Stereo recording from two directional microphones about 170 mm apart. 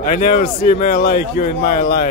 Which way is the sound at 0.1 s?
55° left (ahead or behind).